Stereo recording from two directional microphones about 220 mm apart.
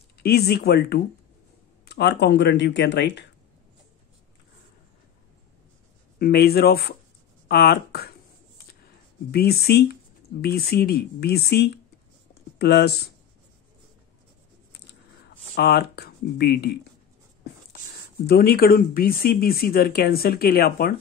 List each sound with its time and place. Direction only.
0.2 s speech: 45° left (ahead or behind)
6.1 s speech: 45° left (ahead or behind)
9.3 s speech: 45° left (ahead or behind)
15.5 s speech: 45° left (ahead or behind)
18.2 s speech: 45° left (ahead or behind)